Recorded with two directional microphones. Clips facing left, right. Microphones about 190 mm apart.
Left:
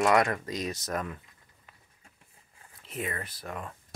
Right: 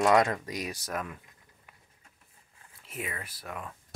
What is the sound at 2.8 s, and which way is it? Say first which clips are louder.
Speech: left 3 dB; 5° right (ahead or behind).